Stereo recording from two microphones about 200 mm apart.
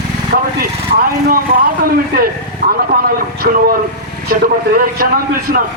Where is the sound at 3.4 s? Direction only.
45° right (ahead or behind).